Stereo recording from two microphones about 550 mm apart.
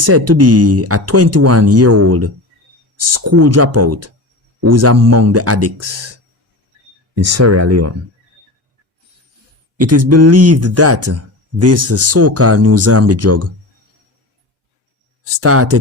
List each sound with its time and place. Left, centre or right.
0.0 s speech: right
7.2 s speech: right
9.8 s speech: right
15.2 s speech: right